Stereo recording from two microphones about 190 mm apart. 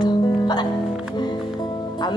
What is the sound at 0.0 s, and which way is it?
Music, 20° left (ahead or behind).